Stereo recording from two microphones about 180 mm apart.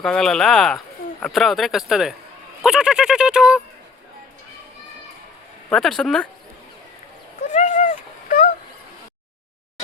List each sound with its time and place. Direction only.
0.0 s speech: 5° left (ahead or behind)
5.6 s speech: centre (ahead or behind)
7.4 s a sound: 45° left (ahead or behind)